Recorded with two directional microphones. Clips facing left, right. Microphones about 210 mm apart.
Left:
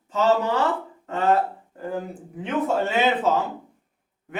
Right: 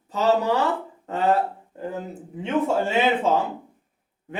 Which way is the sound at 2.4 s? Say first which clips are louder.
Right 1 dB; 25° right (ahead or behind).